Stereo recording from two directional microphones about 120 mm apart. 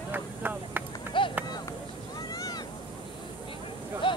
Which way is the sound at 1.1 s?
45° left (ahead or behind).